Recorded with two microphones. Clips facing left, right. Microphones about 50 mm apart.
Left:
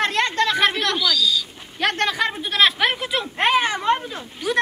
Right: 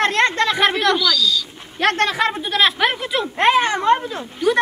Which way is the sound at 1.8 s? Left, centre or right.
Right.